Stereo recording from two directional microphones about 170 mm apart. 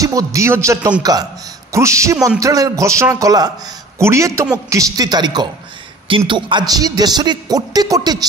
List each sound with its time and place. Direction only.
0.0 s a man's voice: 20° right (ahead or behind)